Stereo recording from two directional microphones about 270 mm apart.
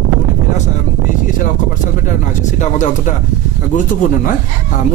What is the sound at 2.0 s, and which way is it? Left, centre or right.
Speech, left.